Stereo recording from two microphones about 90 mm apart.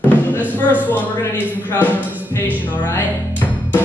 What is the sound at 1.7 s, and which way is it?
Speech, 20° left (ahead or behind).